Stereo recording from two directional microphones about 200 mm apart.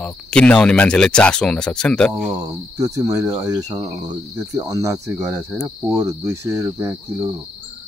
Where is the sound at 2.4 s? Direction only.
15° right (ahead or behind).